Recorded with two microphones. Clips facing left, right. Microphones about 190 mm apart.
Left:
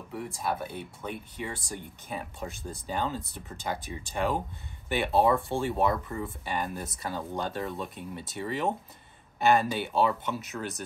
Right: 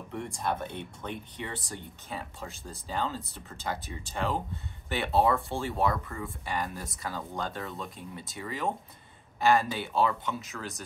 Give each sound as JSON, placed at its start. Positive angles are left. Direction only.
{"t": 0.1, "sound": "speech", "side_deg": 5}
{"t": 7.7, "sound": "speech", "side_deg": 0}
{"t": 8.4, "sound": "speech", "side_deg": 25}